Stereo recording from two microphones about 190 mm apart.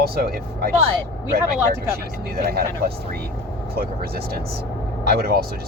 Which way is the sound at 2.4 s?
55° right (ahead or behind).